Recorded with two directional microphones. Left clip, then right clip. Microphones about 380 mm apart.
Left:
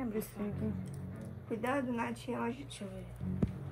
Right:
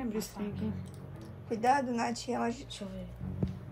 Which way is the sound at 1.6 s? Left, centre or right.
Centre.